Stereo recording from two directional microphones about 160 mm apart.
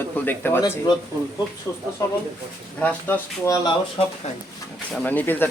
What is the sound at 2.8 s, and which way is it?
Speech, 10° left (ahead or behind).